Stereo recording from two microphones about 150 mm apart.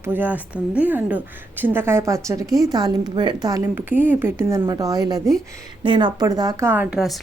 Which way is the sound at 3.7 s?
10° right (ahead or behind).